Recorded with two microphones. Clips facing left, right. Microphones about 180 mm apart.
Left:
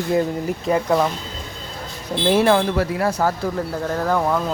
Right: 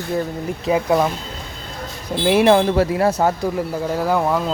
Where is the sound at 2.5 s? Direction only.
25° right (ahead or behind).